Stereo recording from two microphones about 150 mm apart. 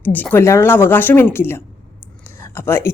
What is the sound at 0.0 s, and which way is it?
Speech, 10° left (ahead or behind).